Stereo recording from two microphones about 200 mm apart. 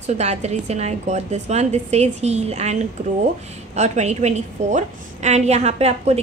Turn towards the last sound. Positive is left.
turn(degrees=-30)  # may be behind; listen again after turning